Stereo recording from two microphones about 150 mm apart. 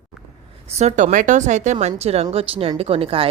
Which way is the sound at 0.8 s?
45° right (ahead or behind).